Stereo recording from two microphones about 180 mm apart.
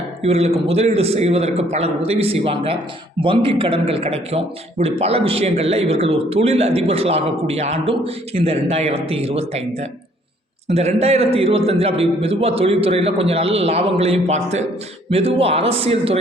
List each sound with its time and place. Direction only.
0.2 s a man's voice: 35° right (ahead or behind)